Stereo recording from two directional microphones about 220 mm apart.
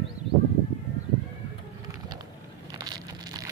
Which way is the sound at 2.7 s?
20° right (ahead or behind).